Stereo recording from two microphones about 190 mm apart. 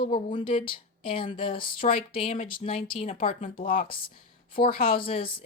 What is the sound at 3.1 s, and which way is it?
Speech, 40° left (ahead or behind).